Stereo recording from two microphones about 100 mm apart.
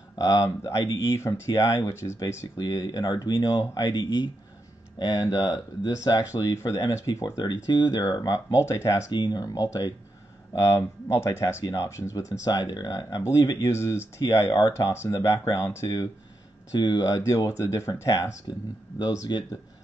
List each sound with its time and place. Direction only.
0.2 s speech: 30° left (ahead or behind)
8.0 s speech: 35° left (ahead or behind)
9.1 s speech: 45° left (ahead or behind)
12.4 s speech: 45° left (ahead or behind)
16.7 s speech: 45° left (ahead or behind); by 18.3 s 30° left (ahead or behind)
18.9 s speech: 45° left (ahead or behind)